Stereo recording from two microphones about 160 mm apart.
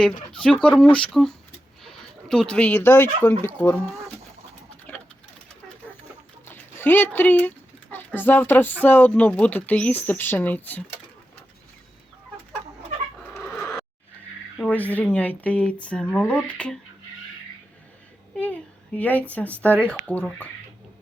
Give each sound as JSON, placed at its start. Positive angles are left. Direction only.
{"t": 0.6, "sound": "speech", "side_deg": 5}
{"t": 6.4, "sound": "speech", "side_deg": 15}
{"t": 13.4, "sound": "a sound", "side_deg": 15}
{"t": 14.6, "sound": "speech", "side_deg": 10}
{"t": 18.3, "sound": "speech", "side_deg": 10}